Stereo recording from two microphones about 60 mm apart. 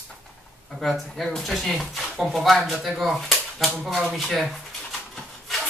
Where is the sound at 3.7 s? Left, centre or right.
Centre.